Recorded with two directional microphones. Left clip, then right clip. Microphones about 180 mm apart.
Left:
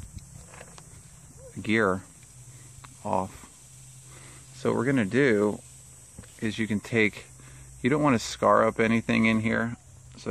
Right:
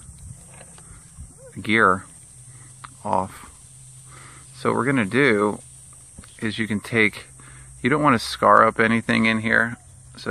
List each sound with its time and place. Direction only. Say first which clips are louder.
1.5 s speech: right 7 dB; 5° left (ahead or behind)
3.1 s speech: right 5 dB; 5° left (ahead or behind)